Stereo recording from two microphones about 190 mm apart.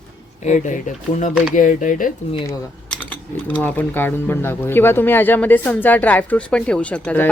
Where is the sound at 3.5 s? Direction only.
10° left (ahead or behind).